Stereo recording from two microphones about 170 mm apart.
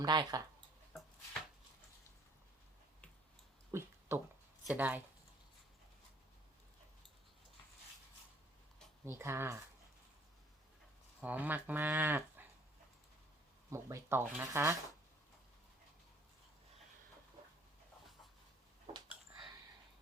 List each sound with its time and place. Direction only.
0.0 s speech: 25° right (ahead or behind)
0.9 s chopping: centre (ahead or behind)
3.7 s a sound: 15° right (ahead or behind)
4.6 s speech: 10° right (ahead or behind)
9.0 s speech: 15° right (ahead or behind)
11.2 s speech: 10° right (ahead or behind)
13.7 s speech: 15° right (ahead or behind)